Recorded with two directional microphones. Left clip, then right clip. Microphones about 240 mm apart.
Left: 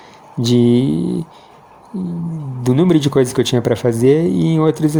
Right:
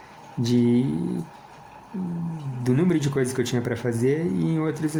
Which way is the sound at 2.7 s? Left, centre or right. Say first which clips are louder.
Left 9 dB; left.